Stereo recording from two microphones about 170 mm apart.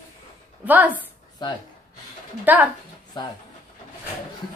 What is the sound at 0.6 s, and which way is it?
Speech, 10° right (ahead or behind).